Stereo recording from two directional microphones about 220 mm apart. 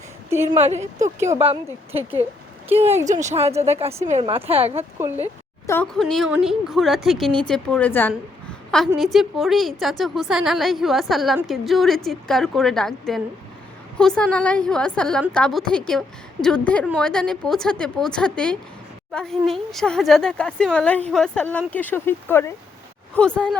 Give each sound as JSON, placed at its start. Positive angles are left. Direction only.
{"t": 0.3, "sound": "a woman's voice", "side_deg": -10}
{"t": 1.9, "sound": "speech", "side_deg": -25}
{"t": 4.8, "sound": "speech", "side_deg": -10}
{"t": 5.2, "sound": "a woman's voice", "side_deg": 10}